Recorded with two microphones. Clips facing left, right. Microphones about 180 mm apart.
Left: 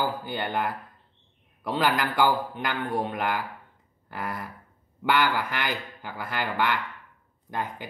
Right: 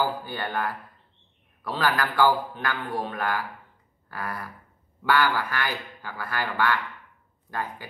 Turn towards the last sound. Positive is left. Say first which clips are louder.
# left 1 dB
turn(degrees=20)  # may be behind; listen again after turning